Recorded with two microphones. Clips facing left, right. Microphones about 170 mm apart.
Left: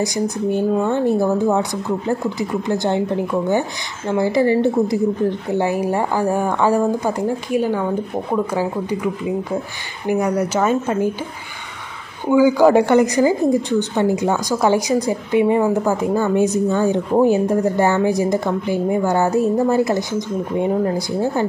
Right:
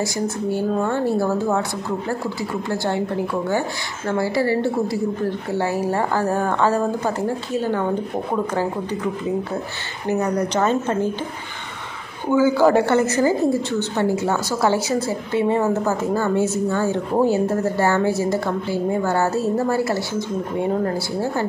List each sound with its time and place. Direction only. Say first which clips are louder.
0.0 s speech: left 3 dB; 20° left (ahead or behind)
4.1 s a woman's voice: left 4 dB; 20° left (ahead or behind)
12.3 s a woman's voice: left 3 dB; 15° left (ahead or behind)